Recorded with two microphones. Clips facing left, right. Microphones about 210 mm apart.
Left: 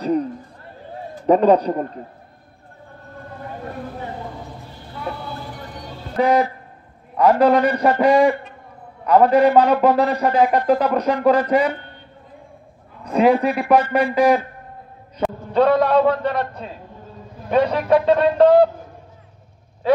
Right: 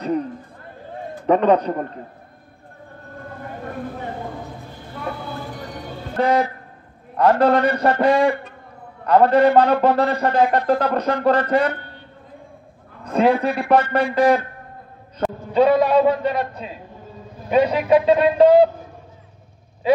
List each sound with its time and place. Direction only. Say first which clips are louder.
1.2 s a man's voice: left 2 dB; 35° left (ahead or behind)
6.1 s a man's voice: left 2 dB; centre (ahead or behind)
13.0 s a man's voice: left 2 dB; centre (ahead or behind)